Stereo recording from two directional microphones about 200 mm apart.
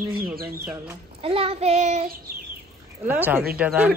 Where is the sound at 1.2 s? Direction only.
30° right (ahead or behind).